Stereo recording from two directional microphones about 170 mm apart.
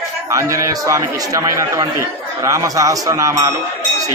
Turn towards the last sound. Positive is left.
turn(degrees=-20)  # may be behind; listen again after turning